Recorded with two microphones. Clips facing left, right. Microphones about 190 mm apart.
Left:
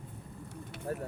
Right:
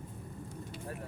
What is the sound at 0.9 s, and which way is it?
Speech, 40° left (ahead or behind).